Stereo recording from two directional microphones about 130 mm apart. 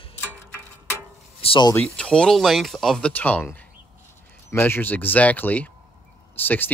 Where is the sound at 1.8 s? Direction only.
5° left (ahead or behind).